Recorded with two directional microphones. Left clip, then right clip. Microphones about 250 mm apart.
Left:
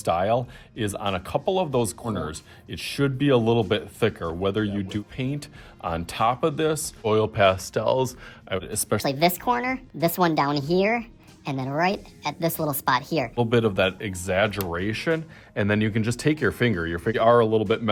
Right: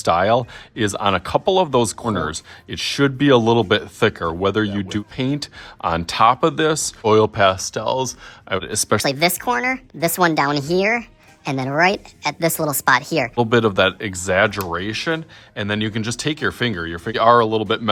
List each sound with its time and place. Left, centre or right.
0.0 s speech: right
8.5 s a woman's voice: right